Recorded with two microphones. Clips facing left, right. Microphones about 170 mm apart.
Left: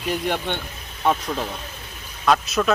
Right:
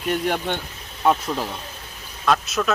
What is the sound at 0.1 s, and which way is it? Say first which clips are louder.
Speech: right 1 dB; centre (ahead or behind).